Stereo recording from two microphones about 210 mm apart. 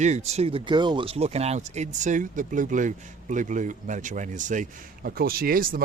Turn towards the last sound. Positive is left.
turn(degrees=-45)  # may be behind; listen again after turning